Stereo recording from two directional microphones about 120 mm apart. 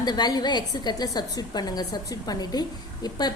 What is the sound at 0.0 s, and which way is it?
A woman's voice, 35° left (ahead or behind).